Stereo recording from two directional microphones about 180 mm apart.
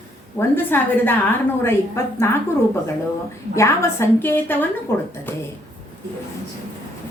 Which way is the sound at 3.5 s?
15° left (ahead or behind).